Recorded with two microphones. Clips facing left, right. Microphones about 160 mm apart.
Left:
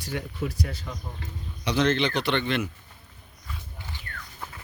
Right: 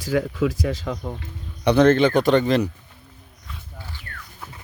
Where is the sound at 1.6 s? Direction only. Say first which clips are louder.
Right 9 dB; 55° right (ahead or behind); by 2.7 s 40° right (ahead or behind).